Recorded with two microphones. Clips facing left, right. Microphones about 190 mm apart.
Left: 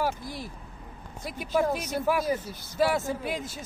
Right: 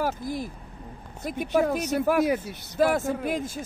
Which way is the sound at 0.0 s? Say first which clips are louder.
Right 3 dB; 45° right (ahead or behind).